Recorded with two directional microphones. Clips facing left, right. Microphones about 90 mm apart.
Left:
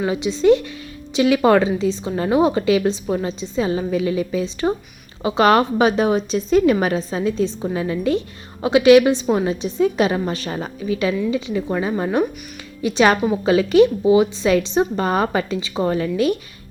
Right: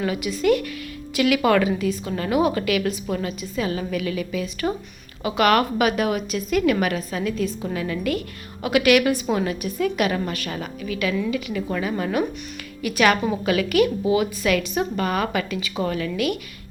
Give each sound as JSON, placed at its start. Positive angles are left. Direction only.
{"t": 0.0, "sound": "a woman's voice", "side_deg": 25}